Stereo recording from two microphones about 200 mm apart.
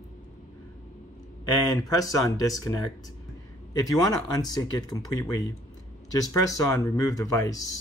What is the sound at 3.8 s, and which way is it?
Speech, 20° left (ahead or behind).